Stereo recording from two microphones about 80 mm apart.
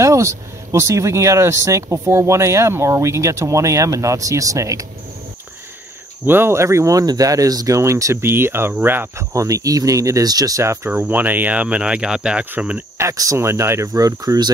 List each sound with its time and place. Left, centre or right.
0.0 s speech: right
6.2 s speech: right
9.3 s speech: right
10.6 s speech: right
10.9 s speech: right
12.9 s speech: right